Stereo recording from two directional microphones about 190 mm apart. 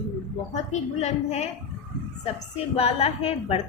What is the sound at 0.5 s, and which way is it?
A woman's voice, 35° left (ahead or behind).